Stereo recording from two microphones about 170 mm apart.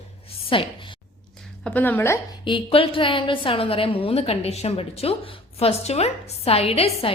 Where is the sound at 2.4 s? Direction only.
30° left (ahead or behind).